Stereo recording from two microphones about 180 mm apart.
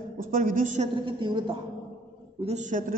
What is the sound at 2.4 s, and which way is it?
Speech, 40° right (ahead or behind).